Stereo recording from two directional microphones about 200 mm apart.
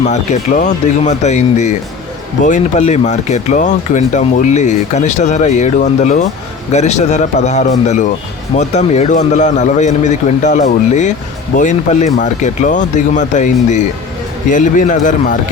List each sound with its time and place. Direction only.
0.1 s speech: 35° left (ahead or behind)